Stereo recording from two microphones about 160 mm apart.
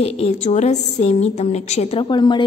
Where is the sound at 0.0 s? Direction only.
45° left (ahead or behind).